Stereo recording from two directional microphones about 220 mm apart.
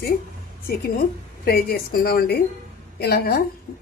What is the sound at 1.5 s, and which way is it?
A woman's voice, 40° left (ahead or behind).